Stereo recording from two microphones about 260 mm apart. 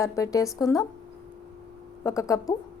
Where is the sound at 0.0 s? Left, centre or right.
Centre.